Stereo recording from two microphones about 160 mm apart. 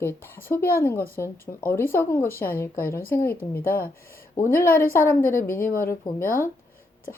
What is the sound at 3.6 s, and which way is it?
Speech, 65° left (ahead or behind).